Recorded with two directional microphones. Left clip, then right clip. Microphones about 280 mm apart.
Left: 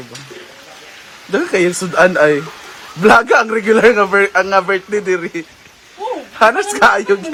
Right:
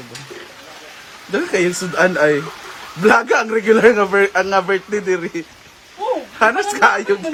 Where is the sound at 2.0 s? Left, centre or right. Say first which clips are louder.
Left 1 dB; centre.